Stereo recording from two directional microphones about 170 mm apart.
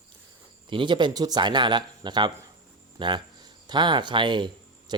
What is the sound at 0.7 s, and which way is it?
Speech, 30° right (ahead or behind).